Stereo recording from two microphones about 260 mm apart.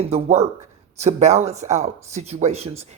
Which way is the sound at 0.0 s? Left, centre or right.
Right.